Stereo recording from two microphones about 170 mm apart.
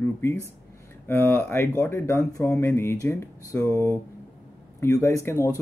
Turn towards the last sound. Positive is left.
turn(degrees=15)  # may be behind; listen again after turning